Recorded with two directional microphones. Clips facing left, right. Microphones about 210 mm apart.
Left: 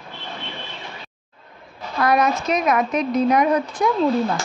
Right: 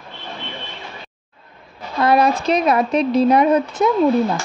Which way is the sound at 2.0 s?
30° right (ahead or behind).